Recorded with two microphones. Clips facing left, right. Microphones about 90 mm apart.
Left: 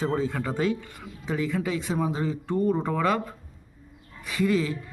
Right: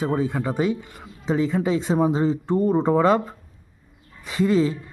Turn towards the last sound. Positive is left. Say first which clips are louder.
# right 5 dB
turn(degrees=-30)  # may be behind; listen again after turning